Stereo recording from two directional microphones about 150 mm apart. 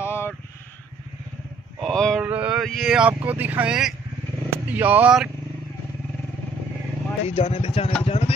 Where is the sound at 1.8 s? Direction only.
5° left (ahead or behind).